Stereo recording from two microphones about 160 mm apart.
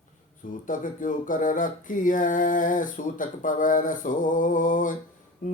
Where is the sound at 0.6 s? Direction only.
55° left (ahead or behind).